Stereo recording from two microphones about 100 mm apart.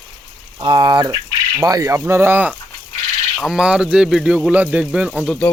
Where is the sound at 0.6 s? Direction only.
50° right (ahead or behind).